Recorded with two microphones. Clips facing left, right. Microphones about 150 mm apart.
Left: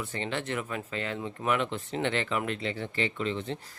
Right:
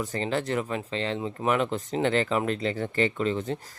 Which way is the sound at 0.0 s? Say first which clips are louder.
Right 5 dB; 40° right (ahead or behind).